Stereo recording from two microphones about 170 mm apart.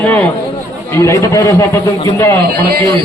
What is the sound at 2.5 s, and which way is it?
Speech, 65° right (ahead or behind).